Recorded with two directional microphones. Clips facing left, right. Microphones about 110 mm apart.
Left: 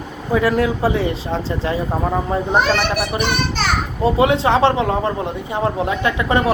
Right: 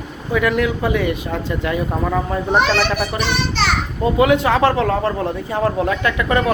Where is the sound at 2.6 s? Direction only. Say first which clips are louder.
Even; 50° left (ahead or behind).